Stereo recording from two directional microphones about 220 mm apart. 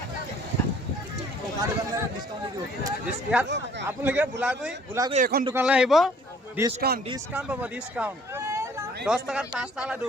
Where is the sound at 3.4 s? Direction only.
50° right (ahead or behind).